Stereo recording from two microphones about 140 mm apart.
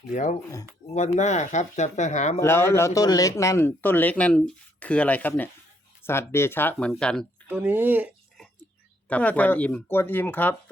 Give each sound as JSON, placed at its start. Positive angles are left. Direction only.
{"t": 0.1, "sound": "speech", "side_deg": 65}
{"t": 0.9, "sound": "speech", "side_deg": 55}
{"t": 2.4, "sound": "speech", "side_deg": 15}
{"t": 7.4, "sound": "speech", "side_deg": -10}
{"t": 9.0, "sound": "speech", "side_deg": 10}